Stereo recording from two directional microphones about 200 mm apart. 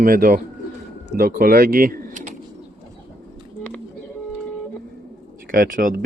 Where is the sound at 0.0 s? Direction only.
45° right (ahead or behind).